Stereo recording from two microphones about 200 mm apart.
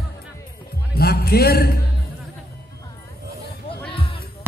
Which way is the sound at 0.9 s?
50° left (ahead or behind).